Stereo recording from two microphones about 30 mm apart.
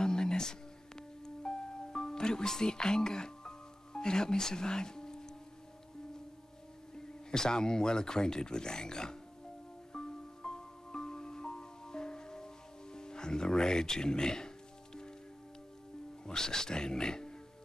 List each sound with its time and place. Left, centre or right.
0.0 s music: left
7.2 s speech: left
9.9 s music: left
16.3 s speech: left